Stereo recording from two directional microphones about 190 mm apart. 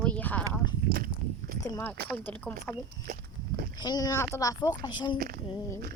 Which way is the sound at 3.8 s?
20° left (ahead or behind).